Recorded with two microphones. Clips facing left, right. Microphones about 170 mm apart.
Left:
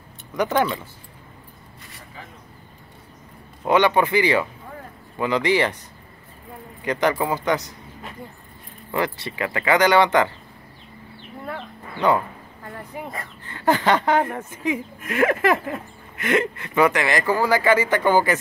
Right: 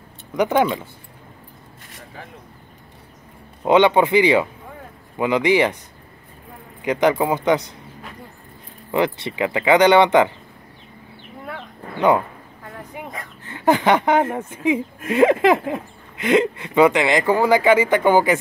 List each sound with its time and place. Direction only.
0.4 s speech: 15° right (ahead or behind)
3.6 s speech: 20° right (ahead or behind)
6.8 s speech: 15° right (ahead or behind)
8.9 s speech: 20° right (ahead or behind)
12.9 s speech: centre (ahead or behind)
13.5 s speech: 15° right (ahead or behind)